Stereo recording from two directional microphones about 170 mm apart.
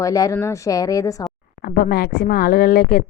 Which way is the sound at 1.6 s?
60° left (ahead or behind).